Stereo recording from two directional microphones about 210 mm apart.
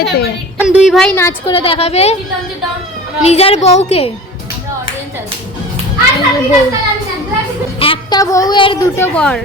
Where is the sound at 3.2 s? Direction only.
30° left (ahead or behind).